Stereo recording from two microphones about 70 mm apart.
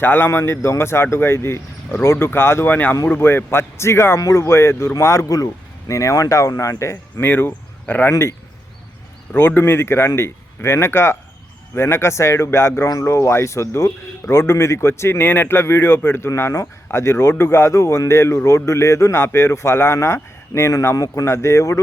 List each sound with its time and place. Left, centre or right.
0.0 s a man's voice: left
2.6 s speech: left
3.2 s a man's voice: left
7.2 s speech: left
8.1 s a man's voice: left
9.3 s a man's voice: left
21.2 s speech: left